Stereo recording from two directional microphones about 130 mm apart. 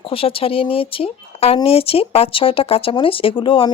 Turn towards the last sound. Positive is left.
turn(degrees=40)  # may be behind; listen again after turning